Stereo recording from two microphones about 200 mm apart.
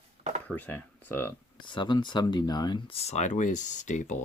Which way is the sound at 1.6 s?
25° left (ahead or behind).